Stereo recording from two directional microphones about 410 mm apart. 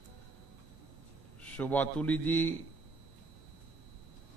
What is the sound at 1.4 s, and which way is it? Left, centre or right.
A man's voice, centre.